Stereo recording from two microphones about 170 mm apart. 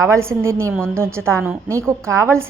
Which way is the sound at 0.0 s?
15° right (ahead or behind).